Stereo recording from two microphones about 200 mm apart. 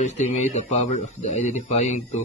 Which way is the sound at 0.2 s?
35° left (ahead or behind).